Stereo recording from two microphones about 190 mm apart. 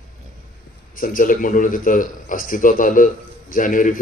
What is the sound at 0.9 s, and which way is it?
Speech, 45° left (ahead or behind).